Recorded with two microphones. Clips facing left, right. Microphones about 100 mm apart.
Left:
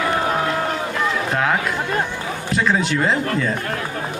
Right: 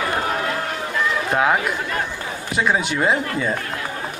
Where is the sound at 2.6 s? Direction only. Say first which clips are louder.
Left 1 dB; 10° right (ahead or behind).